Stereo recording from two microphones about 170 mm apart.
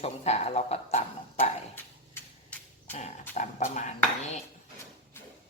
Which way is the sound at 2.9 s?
45° left (ahead or behind).